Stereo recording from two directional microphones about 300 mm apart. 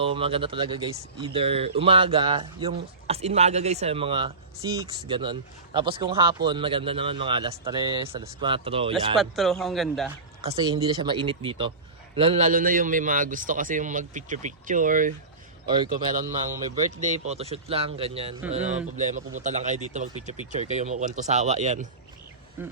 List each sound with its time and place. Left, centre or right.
0.0 s speech: centre
9.1 s speech: centre
10.4 s a man's voice: centre
15.6 s speech: centre
17.0 s a man's voice: right
22.6 s speech: centre